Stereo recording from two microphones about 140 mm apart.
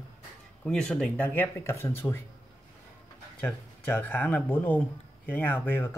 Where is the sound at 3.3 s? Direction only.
10° left (ahead or behind).